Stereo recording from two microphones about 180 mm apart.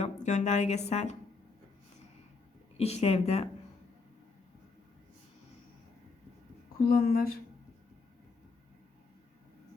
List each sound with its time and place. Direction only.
0.0 s a woman's voice: 40° left (ahead or behind)
2.7 s speech: 35° left (ahead or behind)
6.8 s a woman's voice: 50° left (ahead or behind)